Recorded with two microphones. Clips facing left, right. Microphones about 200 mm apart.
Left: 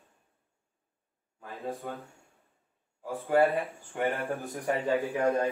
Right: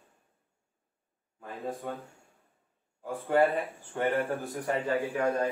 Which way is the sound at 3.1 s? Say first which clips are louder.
Left 1 dB; centre (ahead or behind).